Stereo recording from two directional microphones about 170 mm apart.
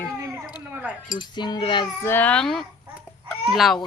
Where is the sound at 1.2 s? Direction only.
25° left (ahead or behind).